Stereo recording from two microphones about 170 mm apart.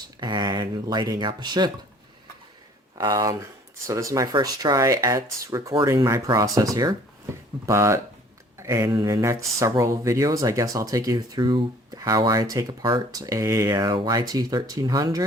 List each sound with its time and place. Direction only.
0.2 s speech: 25° right (ahead or behind)
3.0 s speech: 20° right (ahead or behind)